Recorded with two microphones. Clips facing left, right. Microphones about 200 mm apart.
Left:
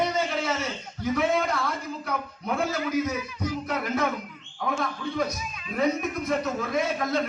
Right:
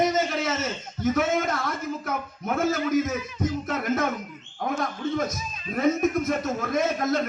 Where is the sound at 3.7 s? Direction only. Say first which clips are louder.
Even; 45° right (ahead or behind).